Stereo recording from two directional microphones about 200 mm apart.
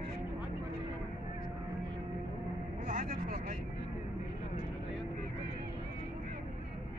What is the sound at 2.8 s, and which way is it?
Vehicle, 40° right (ahead or behind).